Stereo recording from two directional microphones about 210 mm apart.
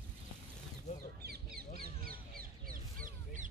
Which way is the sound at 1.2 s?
45° right (ahead or behind).